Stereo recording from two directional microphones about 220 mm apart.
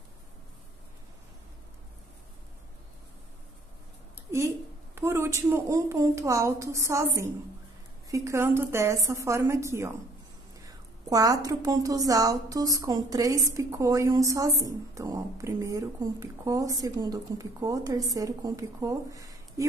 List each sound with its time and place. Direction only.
4.9 s speech: 10° right (ahead or behind)
11.1 s speech: 15° right (ahead or behind)